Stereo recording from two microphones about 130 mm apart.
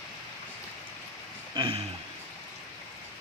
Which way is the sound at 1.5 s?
45° right (ahead or behind).